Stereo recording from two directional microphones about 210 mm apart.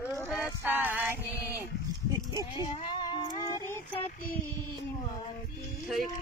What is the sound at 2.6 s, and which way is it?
Cat, 25° left (ahead or behind).